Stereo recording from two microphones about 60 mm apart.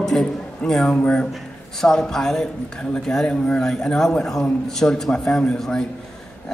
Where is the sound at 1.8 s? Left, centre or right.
Centre.